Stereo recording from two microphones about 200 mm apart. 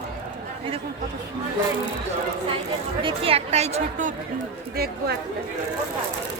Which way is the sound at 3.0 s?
30° right (ahead or behind).